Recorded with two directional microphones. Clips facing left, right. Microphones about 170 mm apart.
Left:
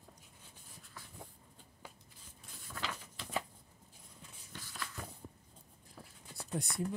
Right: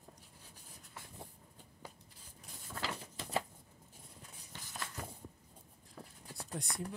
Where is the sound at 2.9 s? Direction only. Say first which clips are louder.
Right 2 dB; 30° right (ahead or behind).